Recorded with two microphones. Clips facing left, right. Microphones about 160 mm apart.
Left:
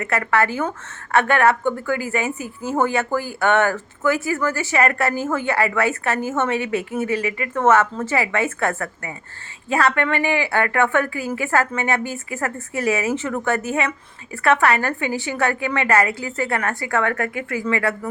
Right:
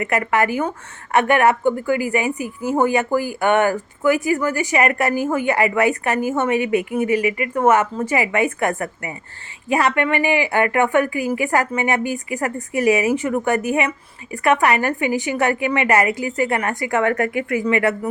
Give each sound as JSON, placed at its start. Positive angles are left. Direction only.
{"t": 0.0, "sound": "a woman's voice", "side_deg": -15}